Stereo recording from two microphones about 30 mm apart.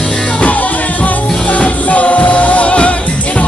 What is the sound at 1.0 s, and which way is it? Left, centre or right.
Music, left.